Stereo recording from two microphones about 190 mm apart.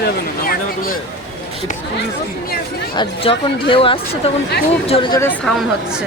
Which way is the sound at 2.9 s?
30° left (ahead or behind).